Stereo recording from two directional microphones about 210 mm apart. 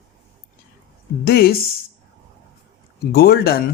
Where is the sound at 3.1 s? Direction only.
45° left (ahead or behind).